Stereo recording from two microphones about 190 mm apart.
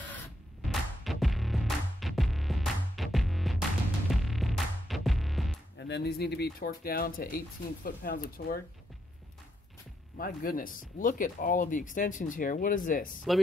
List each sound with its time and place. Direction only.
0.7 s music: centre (ahead or behind)
5.8 s speech: 65° left (ahead or behind)
10.1 s speech: 50° left (ahead or behind)